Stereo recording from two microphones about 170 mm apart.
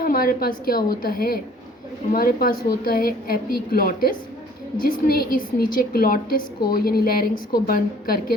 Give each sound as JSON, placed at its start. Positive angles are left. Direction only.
{"t": 0.0, "sound": "a woman's voice", "side_deg": 60}